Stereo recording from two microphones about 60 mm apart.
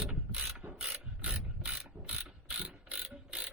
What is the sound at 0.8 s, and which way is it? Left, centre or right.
Ratchet, centre.